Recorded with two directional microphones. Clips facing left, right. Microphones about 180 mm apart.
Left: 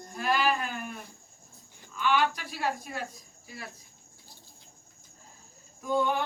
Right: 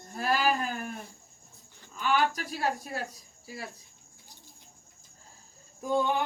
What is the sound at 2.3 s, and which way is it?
Speech, 40° right (ahead or behind).